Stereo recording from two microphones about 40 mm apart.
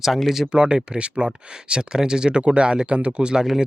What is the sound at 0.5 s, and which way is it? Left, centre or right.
Speech, right.